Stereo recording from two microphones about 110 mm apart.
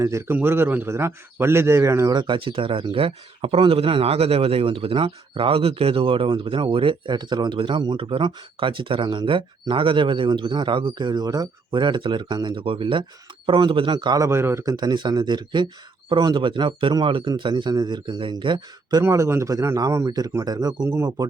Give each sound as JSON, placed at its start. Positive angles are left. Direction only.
{"t": 0.0, "sound": "a man's voice", "side_deg": -25}
{"t": 2.1, "sound": "speech", "side_deg": -45}
{"t": 14.3, "sound": "a man's voice", "side_deg": -25}
{"t": 14.6, "sound": "speech", "side_deg": -35}
{"t": 19.0, "sound": "a man's voice", "side_deg": -25}
{"t": 20.8, "sound": "a man's voice", "side_deg": -25}